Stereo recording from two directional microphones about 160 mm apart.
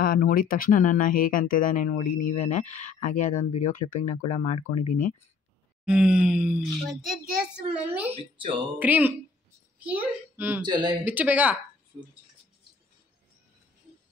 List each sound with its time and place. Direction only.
0.0 s speech: 60° left (ahead or behind)
5.9 s speech: 5° right (ahead or behind)
8.1 s speech: 30° right (ahead or behind)
8.7 s a child's voice: 10° right (ahead or behind)
10.6 s speech: 25° right (ahead or behind)
11.1 s speech: 10° right (ahead or behind)